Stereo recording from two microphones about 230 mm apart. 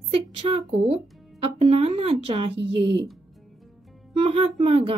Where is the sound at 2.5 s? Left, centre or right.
Right.